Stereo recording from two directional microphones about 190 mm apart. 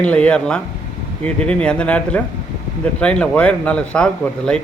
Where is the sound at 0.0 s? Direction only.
5° left (ahead or behind).